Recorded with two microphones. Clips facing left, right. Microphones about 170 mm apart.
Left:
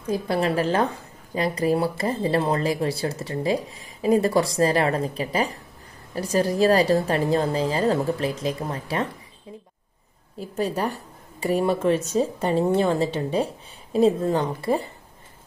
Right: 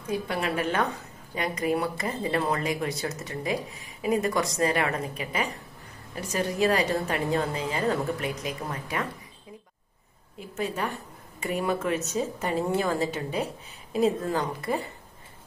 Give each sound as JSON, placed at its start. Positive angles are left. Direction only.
{"t": 0.0, "sound": "a woman's voice", "side_deg": 35}
{"t": 10.4, "sound": "a woman's voice", "side_deg": 35}